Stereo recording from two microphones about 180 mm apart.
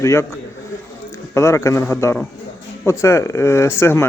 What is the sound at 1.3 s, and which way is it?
A man's voice, 15° left (ahead or behind).